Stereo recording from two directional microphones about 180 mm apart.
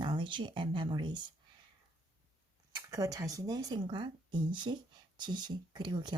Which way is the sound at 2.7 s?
20° right (ahead or behind).